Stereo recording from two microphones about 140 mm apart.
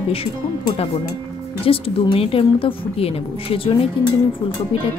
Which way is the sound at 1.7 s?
40° left (ahead or behind).